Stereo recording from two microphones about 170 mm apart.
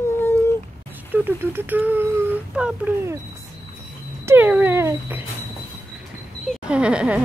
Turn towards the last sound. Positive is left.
turn(degrees=-5)  # may be behind; listen again after turning